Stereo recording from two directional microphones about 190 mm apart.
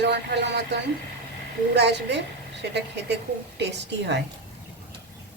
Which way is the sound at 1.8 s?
65° right (ahead or behind).